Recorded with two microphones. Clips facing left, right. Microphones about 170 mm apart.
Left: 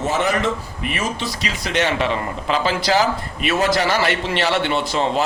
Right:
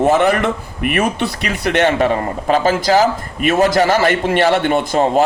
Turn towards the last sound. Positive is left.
turn(degrees=-50)  # may be behind; listen again after turning